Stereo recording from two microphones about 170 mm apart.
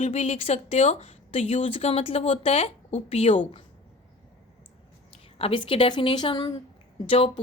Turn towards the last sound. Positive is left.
turn(degrees=30)  # may be behind; listen again after turning